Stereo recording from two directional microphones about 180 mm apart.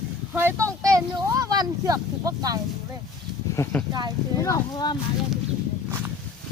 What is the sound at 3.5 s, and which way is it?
Speech, 15° left (ahead or behind).